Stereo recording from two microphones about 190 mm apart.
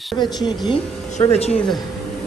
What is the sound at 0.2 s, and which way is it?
Speech, 20° left (ahead or behind).